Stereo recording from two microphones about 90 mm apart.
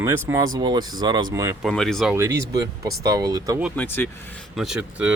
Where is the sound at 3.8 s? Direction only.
25° left (ahead or behind).